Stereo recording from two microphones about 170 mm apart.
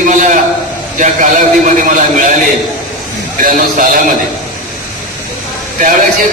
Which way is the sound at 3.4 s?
50° right (ahead or behind).